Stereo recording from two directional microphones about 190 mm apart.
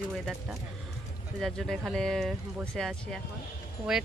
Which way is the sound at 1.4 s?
Centre (ahead or behind).